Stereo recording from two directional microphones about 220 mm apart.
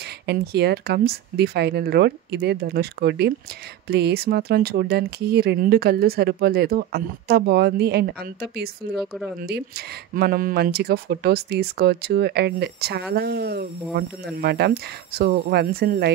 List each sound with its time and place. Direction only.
0.0 s speech: 50° right (ahead or behind)
8.9 s speech: centre (ahead or behind)
9.4 s speech: 45° right (ahead or behind)